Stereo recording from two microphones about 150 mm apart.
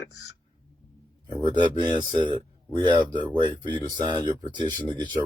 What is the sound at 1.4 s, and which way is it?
Speech, 30° right (ahead or behind).